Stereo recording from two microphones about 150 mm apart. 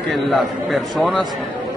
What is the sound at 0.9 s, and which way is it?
Speech, centre (ahead or behind).